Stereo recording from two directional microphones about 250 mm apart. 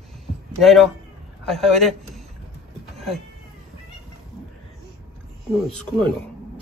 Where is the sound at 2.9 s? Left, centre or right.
Centre.